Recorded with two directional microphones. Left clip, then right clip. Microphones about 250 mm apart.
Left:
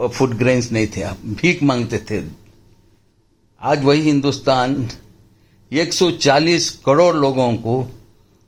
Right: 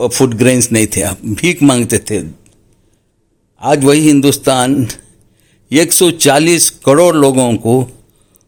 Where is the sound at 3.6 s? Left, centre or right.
Right.